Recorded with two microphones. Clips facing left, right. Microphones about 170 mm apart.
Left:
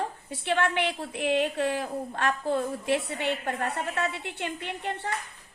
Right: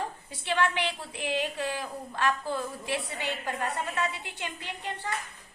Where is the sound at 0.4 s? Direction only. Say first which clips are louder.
Left 2 dB; 55° left (ahead or behind).